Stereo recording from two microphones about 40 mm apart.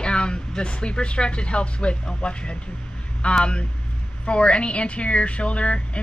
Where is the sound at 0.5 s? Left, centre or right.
Left.